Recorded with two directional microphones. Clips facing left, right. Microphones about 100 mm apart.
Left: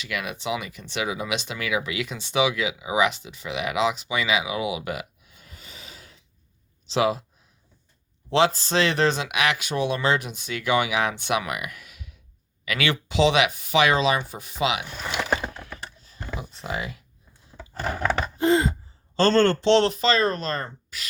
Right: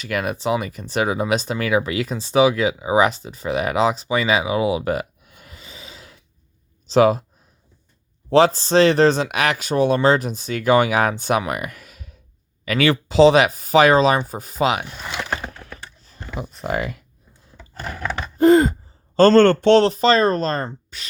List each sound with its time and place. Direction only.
0.0 s speech: 40° right (ahead or behind)
5.2 s snort: 65° right (ahead or behind); by 6.2 s 85° right
6.8 s speech: 45° right (ahead or behind)
8.3 s speech: 40° right (ahead or behind)
16.4 s a man's voice: 50° right (ahead or behind)
18.3 s gasp: 50° right (ahead or behind)
19.1 s a man's voice: 45° right (ahead or behind)
19.8 s speech: 40° right (ahead or behind)